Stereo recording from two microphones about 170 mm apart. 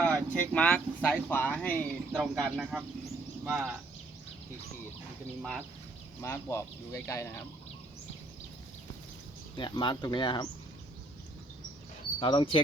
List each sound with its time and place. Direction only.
0.0 s speech: 5° left (ahead or behind); by 3.7 s 10° right (ahead or behind)
5.4 s speech: centre (ahead or behind)
6.2 s speech: 15° left (ahead or behind)
9.6 s speech: 30° left (ahead or behind)
12.2 s speech: 30° left (ahead or behind)